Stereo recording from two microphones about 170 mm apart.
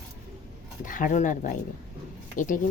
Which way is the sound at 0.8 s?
50° left (ahead or behind).